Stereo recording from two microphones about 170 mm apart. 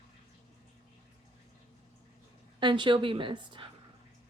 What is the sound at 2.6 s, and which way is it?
Speech, 25° right (ahead or behind).